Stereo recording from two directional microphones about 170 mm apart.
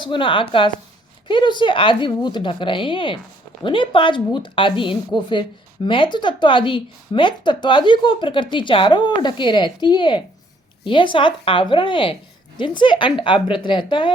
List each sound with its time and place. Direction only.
0.0 s a woman's voice: 30° left (ahead or behind)